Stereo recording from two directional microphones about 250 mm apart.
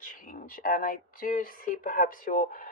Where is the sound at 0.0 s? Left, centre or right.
Left.